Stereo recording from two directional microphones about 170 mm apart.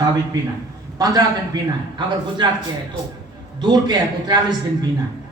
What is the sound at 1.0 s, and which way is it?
A man's voice, 20° right (ahead or behind).